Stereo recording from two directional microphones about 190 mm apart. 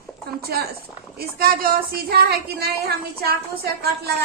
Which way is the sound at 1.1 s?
55° right (ahead or behind).